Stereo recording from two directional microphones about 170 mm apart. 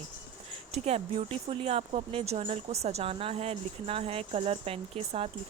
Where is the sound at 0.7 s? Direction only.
35° right (ahead or behind).